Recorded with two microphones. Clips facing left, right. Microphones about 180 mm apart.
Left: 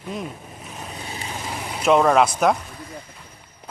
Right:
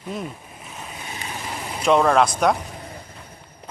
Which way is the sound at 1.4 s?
5° left (ahead or behind).